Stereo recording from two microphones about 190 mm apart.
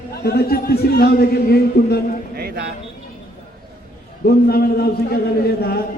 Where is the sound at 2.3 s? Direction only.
55° right (ahead or behind).